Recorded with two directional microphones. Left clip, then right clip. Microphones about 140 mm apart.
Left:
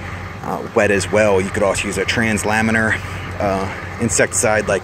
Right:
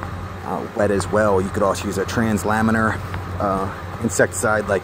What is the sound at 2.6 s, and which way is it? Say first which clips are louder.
Speech: left 3 dB; 15° left (ahead or behind).